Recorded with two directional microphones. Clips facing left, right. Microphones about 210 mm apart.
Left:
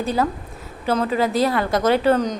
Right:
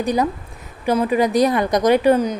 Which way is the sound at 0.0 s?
15° right (ahead or behind).